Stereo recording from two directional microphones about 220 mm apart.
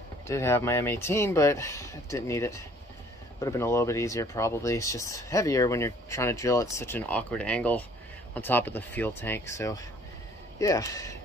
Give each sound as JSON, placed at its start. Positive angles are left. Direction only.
{"t": 0.3, "sound": "speech", "side_deg": 10}